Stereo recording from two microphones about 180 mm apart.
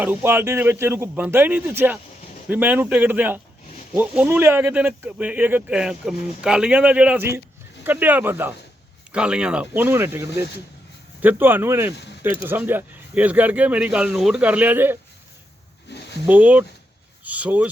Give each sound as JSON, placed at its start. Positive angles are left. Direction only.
{"t": 0.0, "sound": "speech", "side_deg": -10}
{"t": 15.9, "sound": "a sound", "side_deg": 70}
{"t": 16.2, "sound": "speech", "side_deg": -10}